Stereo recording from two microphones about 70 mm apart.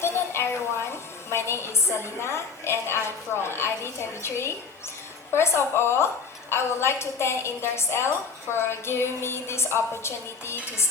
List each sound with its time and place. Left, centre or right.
0.0 s a woman's voice: left